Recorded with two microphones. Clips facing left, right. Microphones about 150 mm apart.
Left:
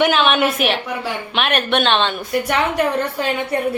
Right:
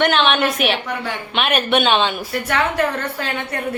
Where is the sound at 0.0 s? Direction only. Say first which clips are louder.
Left 1 dB; 5° left (ahead or behind).